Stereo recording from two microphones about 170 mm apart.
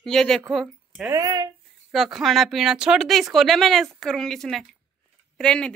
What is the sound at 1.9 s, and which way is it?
Speech, centre (ahead or behind).